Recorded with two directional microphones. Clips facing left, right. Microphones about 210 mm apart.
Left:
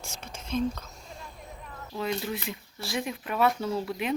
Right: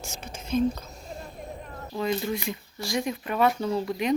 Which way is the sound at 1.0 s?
45° right (ahead or behind).